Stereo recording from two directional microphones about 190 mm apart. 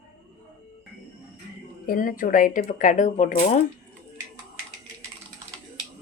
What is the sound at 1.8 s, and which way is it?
Speech, 45° left (ahead or behind).